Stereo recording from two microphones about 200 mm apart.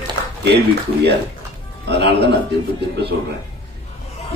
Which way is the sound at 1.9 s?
55° right (ahead or behind).